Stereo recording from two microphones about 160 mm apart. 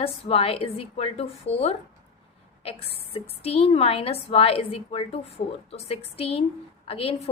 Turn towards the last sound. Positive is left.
turn(degrees=35)  # may be behind; listen again after turning